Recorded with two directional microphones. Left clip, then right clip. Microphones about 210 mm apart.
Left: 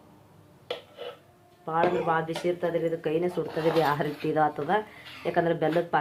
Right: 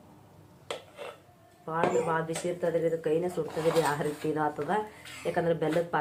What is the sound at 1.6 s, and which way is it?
Speech, 35° left (ahead or behind).